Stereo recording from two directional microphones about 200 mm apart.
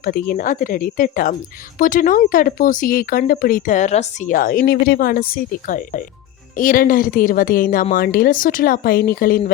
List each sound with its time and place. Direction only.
0.0 s speech: 45° left (ahead or behind)